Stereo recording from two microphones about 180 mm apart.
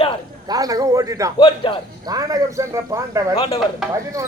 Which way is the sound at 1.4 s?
30° left (ahead or behind).